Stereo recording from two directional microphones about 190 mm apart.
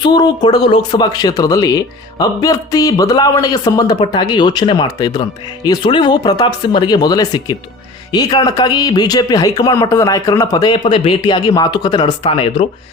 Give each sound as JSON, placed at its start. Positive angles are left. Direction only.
{"t": 0.0, "sound": "speech", "side_deg": 20}